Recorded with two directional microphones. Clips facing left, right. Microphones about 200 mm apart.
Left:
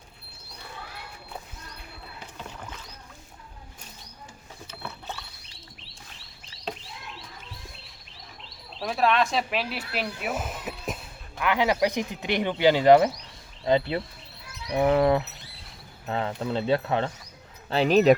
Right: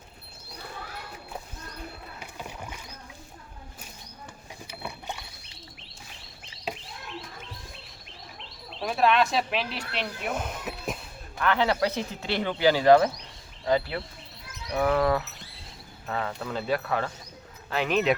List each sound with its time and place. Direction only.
2.1 s rowboat: 10° right (ahead or behind)
4.7 s a sound: 15° right (ahead or behind)
6.7 s bird: 10° right (ahead or behind)
8.8 s speech: centre (ahead or behind)
11.3 s speech: 15° left (ahead or behind); by 18.1 s 35° left (ahead or behind)